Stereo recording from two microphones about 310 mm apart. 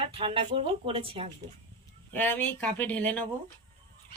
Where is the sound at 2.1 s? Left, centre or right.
Centre.